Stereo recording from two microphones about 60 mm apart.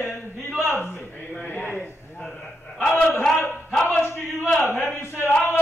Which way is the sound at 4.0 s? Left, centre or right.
Left.